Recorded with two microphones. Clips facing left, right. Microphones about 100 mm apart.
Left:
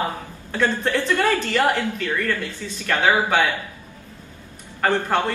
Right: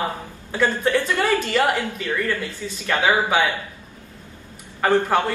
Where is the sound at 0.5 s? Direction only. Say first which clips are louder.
Right 1 dB; 15° right (ahead or behind).